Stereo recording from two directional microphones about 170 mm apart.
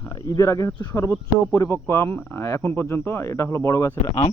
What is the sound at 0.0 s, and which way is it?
Speech, 20° left (ahead or behind).